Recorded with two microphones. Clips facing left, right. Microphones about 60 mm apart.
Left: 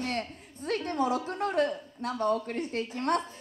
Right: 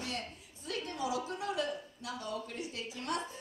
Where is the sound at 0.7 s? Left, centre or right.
Left.